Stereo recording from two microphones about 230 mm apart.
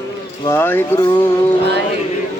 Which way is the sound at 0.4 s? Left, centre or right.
Centre.